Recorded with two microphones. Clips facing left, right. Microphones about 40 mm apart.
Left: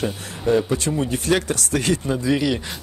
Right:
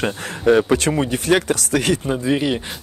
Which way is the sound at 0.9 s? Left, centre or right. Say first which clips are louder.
Right 3 dB; right.